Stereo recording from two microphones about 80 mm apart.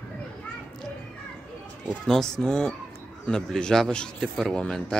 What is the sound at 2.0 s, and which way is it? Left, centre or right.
Speech, centre.